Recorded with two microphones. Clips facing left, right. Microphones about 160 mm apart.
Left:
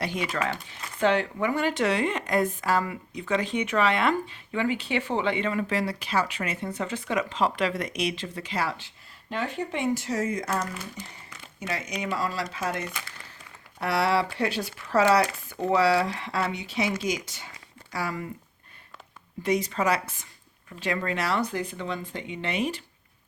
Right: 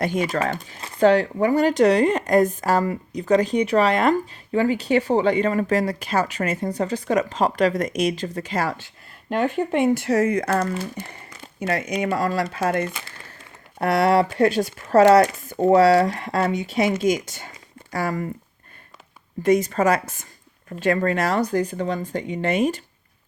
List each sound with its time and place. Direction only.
0.0 s speech: 45° right (ahead or behind)
19.4 s speech: 50° right (ahead or behind)